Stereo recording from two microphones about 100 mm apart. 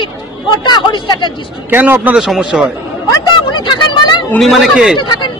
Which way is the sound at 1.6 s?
20° right (ahead or behind).